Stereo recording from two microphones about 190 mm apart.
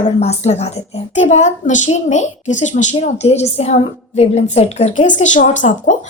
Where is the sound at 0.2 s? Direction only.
35° left (ahead or behind).